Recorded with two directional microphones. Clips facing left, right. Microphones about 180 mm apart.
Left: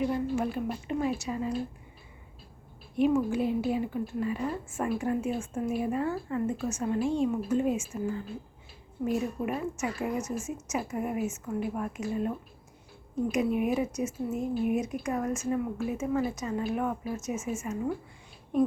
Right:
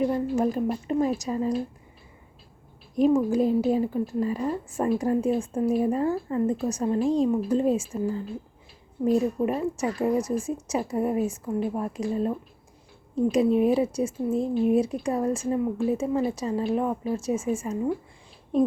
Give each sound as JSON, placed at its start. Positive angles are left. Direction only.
{"t": 0.1, "sound": "a woman's voice", "side_deg": -40}
{"t": 2.9, "sound": "a woman's voice", "side_deg": -35}
{"t": 13.3, "sound": "a woman's voice", "side_deg": -30}